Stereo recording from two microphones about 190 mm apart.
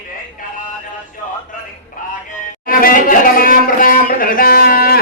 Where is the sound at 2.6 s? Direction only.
45° left (ahead or behind).